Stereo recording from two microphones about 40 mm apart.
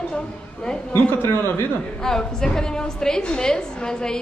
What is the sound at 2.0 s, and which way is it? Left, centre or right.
A woman's voice, centre.